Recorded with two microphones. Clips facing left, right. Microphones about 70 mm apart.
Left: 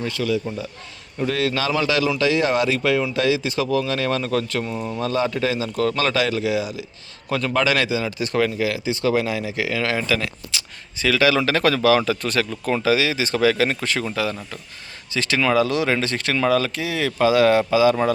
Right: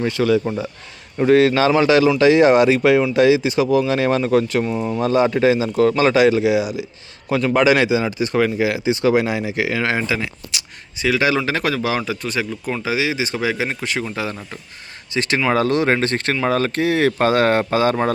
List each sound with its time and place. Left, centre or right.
0.0 s speech: right
1.3 s speech: right; by 8.4 s centre
8.4 s speech: centre
12.8 s speech: right
15.1 s speech: right
15.5 s speech: right